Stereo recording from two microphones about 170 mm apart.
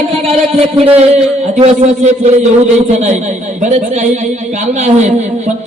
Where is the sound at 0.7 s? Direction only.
35° right (ahead or behind).